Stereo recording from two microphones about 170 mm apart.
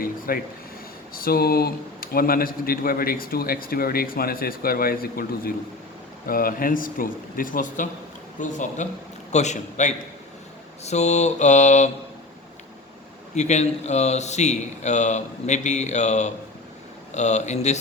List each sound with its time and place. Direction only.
0.0 s a sound: 60° left (ahead or behind)
1.1 s a man's voice: 60° left (ahead or behind); by 11.9 s 45° left (ahead or behind)
13.3 s speech: 45° left (ahead or behind)